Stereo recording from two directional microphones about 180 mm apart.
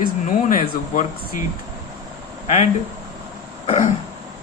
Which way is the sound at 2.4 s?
40° left (ahead or behind).